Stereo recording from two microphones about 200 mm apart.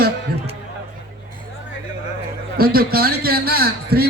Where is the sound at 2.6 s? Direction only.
50° right (ahead or behind).